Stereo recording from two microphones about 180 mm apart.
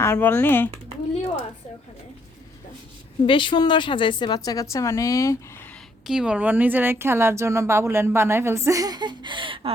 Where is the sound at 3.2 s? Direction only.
30° left (ahead or behind); by 5.8 s 10° left (ahead or behind).